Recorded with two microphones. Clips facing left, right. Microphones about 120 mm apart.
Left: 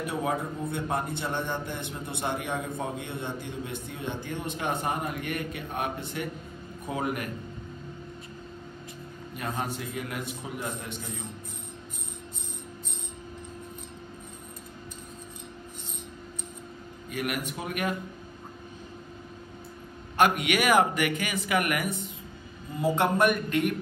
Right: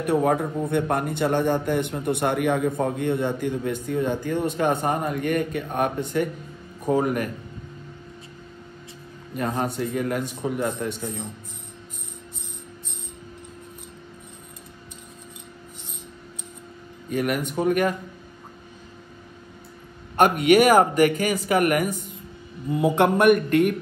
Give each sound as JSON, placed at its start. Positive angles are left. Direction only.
{"t": 0.0, "sound": "a man's voice", "side_deg": -60}
{"t": 9.8, "sound": "speech", "side_deg": -45}
{"t": 17.1, "sound": "speech", "side_deg": -40}
{"t": 20.2, "sound": "a man's voice", "side_deg": -45}
{"t": 22.8, "sound": "a man's voice", "side_deg": -60}